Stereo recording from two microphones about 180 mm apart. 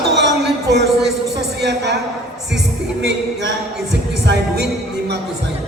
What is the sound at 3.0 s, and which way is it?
A man's voice, 75° right (ahead or behind).